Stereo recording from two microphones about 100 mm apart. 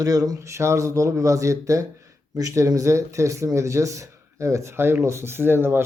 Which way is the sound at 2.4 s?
35° right (ahead or behind).